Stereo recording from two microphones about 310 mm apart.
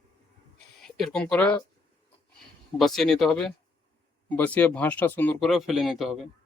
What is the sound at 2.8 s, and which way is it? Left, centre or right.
Speech, centre.